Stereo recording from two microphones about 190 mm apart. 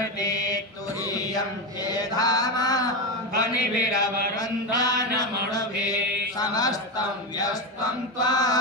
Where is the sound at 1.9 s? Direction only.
20° left (ahead or behind).